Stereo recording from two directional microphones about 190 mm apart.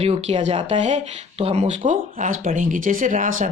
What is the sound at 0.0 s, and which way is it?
Speech, 35° right (ahead or behind).